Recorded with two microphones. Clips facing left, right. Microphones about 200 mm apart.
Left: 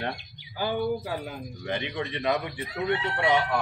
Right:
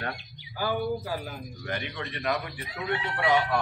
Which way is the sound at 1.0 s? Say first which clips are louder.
Left 1 dB; 20° left (ahead or behind).